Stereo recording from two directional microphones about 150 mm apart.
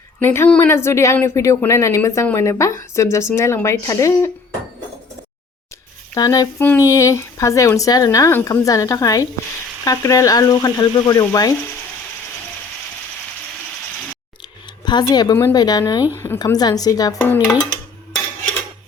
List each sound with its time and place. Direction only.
0.2 s speech: 10° left (ahead or behind)
6.1 s speech: 25° left (ahead or behind)
14.8 s speech: 30° left (ahead or behind)